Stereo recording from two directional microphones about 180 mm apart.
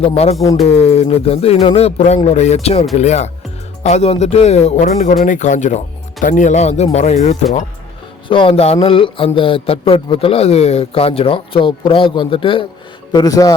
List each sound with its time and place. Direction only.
0.0 s speech: 35° left (ahead or behind)
8.3 s a man's voice: 30° left (ahead or behind)